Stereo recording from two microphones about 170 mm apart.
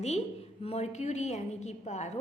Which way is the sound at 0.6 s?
40° left (ahead or behind).